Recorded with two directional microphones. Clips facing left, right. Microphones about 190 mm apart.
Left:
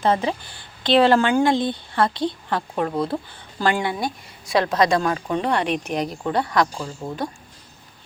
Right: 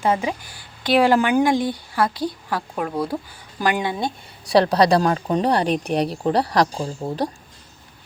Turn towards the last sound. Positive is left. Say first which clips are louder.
# right 2 dB
turn(degrees=-30)  # may be behind; listen again after turning